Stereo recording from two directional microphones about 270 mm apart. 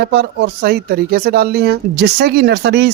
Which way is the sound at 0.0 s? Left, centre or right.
Right.